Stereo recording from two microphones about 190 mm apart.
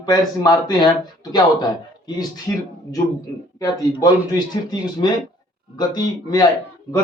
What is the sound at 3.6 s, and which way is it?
A man's voice, 20° left (ahead or behind).